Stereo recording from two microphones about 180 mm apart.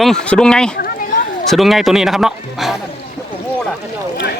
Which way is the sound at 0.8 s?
50° left (ahead or behind).